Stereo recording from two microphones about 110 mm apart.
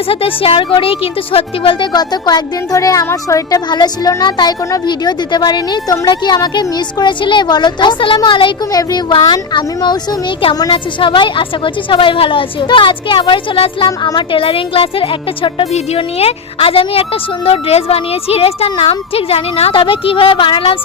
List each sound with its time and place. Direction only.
0.1 s speech: 60° left (ahead or behind)
1.9 s a woman's voice: 40° left (ahead or behind)
3.7 s a woman's voice: 40° left (ahead or behind)
8.7 s a woman's voice: 35° left (ahead or behind)
13.8 s a woman's voice: 35° left (ahead or behind)
14.2 s speech: 55° left (ahead or behind)
19.7 s a woman's voice: 50° left (ahead or behind)